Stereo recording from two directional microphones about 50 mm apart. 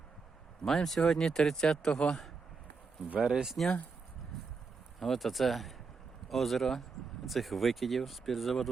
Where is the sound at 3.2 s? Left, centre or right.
Centre.